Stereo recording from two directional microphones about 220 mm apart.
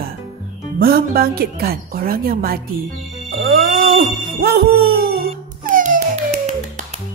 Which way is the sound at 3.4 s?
45° right (ahead or behind).